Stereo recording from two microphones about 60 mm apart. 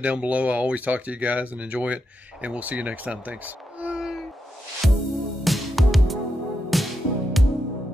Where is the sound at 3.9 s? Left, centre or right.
Centre.